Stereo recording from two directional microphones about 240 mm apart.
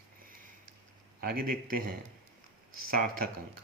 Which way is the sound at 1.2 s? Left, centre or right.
Right.